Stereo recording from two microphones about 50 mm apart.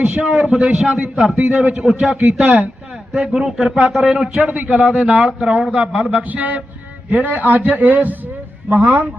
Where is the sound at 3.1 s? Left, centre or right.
Centre.